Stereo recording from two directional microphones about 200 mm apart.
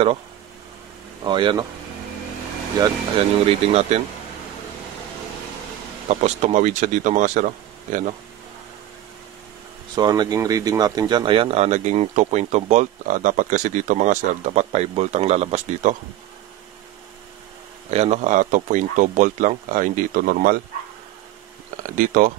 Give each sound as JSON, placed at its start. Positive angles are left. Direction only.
{"t": 1.2, "sound": "speech", "side_deg": -25}
{"t": 3.4, "sound": "speech", "side_deg": -30}
{"t": 6.0, "sound": "speech", "side_deg": -35}
{"t": 9.9, "sound": "speech", "side_deg": -20}
{"t": 17.9, "sound": "speech", "side_deg": -35}
{"t": 21.9, "sound": "speech", "side_deg": -40}